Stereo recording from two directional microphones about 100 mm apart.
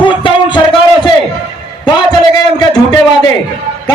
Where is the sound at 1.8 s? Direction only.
45° left (ahead or behind).